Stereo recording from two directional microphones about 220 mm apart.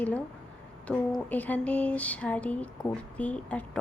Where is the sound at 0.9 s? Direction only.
5° left (ahead or behind).